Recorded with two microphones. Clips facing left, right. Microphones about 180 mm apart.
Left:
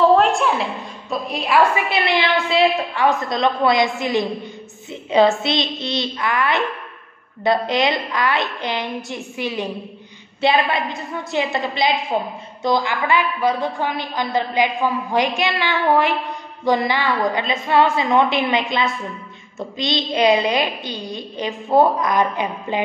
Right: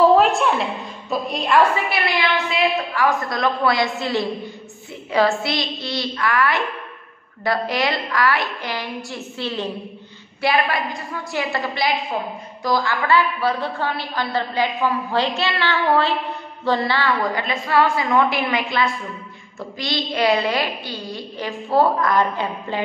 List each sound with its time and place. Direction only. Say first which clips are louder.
0.1 s a sound: even; centre (ahead or behind)
1.1 s a woman's voice: even; centre (ahead or behind)
1.9 s a woman's voice: left 2 dB; 25° left (ahead or behind)